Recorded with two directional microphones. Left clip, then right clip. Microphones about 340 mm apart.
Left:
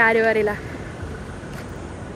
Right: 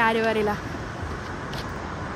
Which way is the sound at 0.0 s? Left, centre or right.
Centre.